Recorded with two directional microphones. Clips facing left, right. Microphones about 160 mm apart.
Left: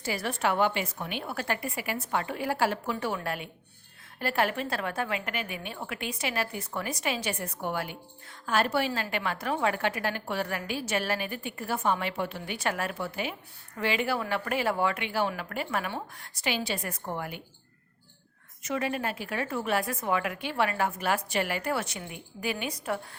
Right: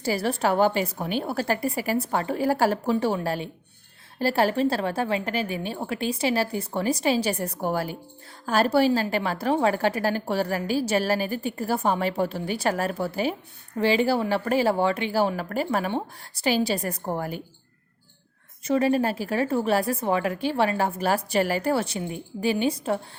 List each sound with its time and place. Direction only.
0.0 s a woman's voice: 35° right (ahead or behind)
18.6 s a woman's voice: 35° right (ahead or behind)